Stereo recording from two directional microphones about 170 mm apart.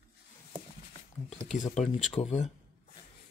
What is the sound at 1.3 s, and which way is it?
Speech, 45° left (ahead or behind).